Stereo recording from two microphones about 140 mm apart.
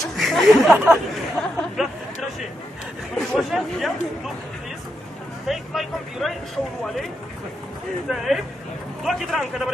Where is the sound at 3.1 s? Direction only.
5° left (ahead or behind).